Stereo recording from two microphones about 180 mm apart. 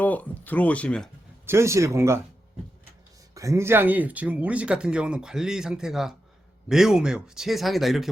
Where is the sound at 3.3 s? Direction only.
15° right (ahead or behind).